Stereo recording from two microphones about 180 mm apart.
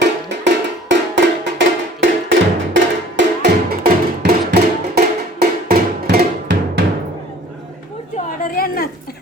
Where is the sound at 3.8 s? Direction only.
60° right (ahead or behind).